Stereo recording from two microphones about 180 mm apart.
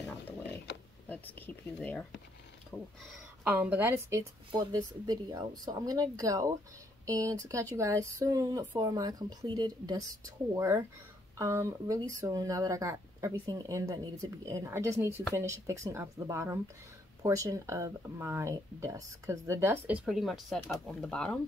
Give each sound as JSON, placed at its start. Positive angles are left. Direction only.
{"t": 1.0, "sound": "speech", "side_deg": 10}
{"t": 3.4, "sound": "speech", "side_deg": -10}
{"t": 4.5, "sound": "speech", "side_deg": -25}
{"t": 20.1, "sound": "speech", "side_deg": 0}